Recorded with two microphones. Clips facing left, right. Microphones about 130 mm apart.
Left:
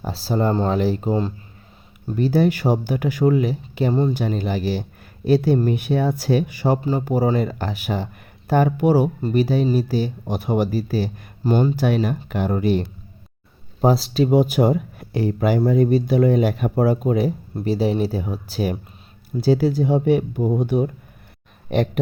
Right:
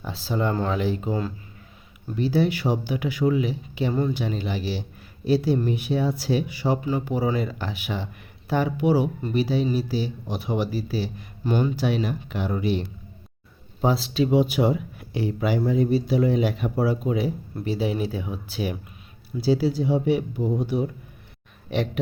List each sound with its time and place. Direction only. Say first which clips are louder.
0.0 s speech: left 5 dB; 40° left (ahead or behind)
2.1 s a man's voice: left 4 dB; 45° left (ahead or behind)
6.8 s speech: left 4 dB; 40° left (ahead or behind)
11.8 s speech: left 4 dB; 50° left (ahead or behind)
13.8 s speech: left 4 dB; 40° left (ahead or behind)